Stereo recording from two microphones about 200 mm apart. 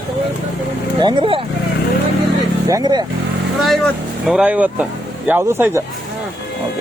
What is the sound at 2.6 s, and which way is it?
Speech, 20° right (ahead or behind).